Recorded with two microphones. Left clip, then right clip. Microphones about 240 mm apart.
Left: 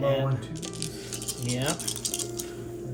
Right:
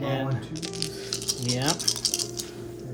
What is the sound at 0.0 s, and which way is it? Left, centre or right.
Speech, right.